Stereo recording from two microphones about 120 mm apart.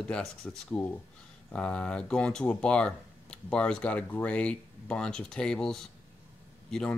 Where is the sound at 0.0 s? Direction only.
5° left (ahead or behind).